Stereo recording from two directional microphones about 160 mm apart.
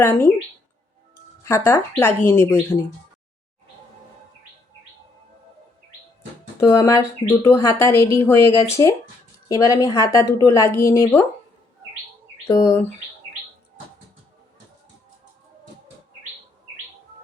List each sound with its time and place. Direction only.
0.0 s a woman's voice: 15° left (ahead or behind)
1.5 s a woman's voice: 15° left (ahead or behind)
6.6 s a woman's voice: 15° left (ahead or behind)
12.5 s a woman's voice: 20° left (ahead or behind)